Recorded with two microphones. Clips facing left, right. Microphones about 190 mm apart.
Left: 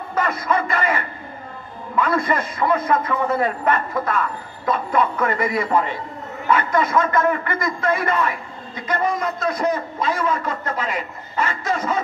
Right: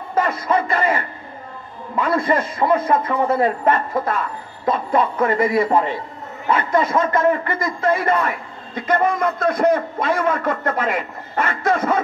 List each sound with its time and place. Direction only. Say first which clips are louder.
0.1 s a man's voice: right 2 dB; 30° right (ahead or behind)
8.8 s a man's voice: right 4 dB; 55° right (ahead or behind)